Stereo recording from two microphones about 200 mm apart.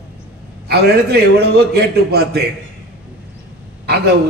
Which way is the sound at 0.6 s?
55° right (ahead or behind).